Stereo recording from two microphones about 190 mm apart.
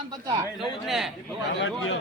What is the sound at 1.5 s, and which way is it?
Speech, 70° left (ahead or behind).